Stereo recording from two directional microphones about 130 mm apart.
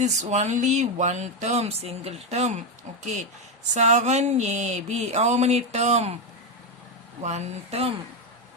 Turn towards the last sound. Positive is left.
turn(degrees=-55)  # may be behind; listen again after turning